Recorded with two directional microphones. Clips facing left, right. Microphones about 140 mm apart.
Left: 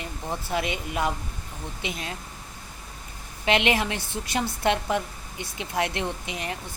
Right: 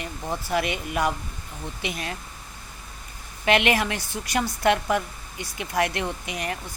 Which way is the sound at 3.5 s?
20° left (ahead or behind).